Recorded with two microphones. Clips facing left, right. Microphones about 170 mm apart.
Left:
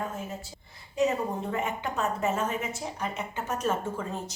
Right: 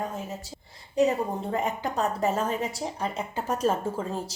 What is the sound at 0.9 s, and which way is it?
A woman's voice, 35° right (ahead or behind).